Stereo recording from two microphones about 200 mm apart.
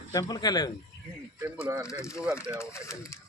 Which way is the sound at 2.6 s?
15° left (ahead or behind).